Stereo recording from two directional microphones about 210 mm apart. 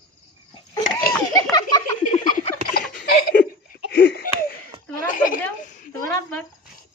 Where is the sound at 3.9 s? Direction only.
50° left (ahead or behind).